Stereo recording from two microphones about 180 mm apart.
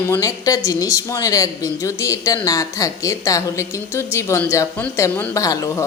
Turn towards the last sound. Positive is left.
turn(degrees=20)  # may be behind; listen again after turning